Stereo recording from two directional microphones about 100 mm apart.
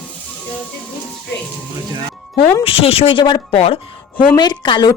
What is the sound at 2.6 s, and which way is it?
Speech, 70° left (ahead or behind).